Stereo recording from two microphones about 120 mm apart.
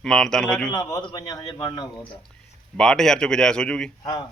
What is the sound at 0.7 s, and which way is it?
A man's voice, 30° left (ahead or behind).